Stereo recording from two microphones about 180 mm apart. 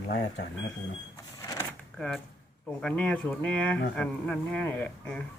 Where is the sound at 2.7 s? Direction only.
5° left (ahead or behind).